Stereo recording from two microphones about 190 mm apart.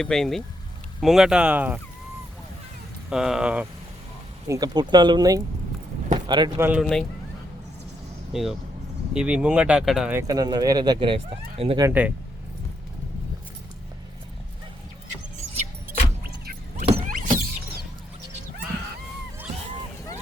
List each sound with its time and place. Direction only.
0.0 s speech: centre (ahead or behind)
3.1 s speech: 5° right (ahead or behind)
4.4 s speech: 20° right (ahead or behind)
6.1 s a sound: 25° right (ahead or behind)
6.6 s speech: 10° right (ahead or behind)
8.3 s speech: centre (ahead or behind)
10.2 s speech: 20° right (ahead or behind)
11.8 s speech: 10° right (ahead or behind)
16.7 s vehicle: 35° right (ahead or behind)
17.1 s power windows: 45° right (ahead or behind)